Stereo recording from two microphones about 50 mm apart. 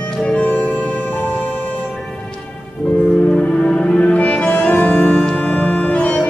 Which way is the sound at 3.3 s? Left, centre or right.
Left.